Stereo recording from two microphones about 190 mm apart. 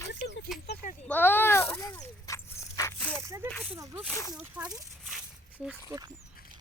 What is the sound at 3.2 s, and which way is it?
A woman's voice, 15° right (ahead or behind).